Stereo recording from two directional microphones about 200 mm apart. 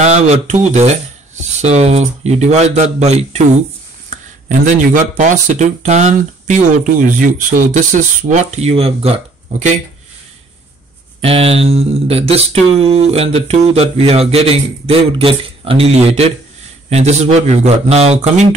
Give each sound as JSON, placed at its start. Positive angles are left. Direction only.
{"t": 0.0, "sound": "speech", "side_deg": -35}
{"t": 11.1, "sound": "speech", "side_deg": -30}